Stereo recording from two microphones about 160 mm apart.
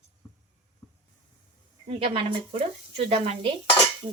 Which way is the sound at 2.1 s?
35° right (ahead or behind).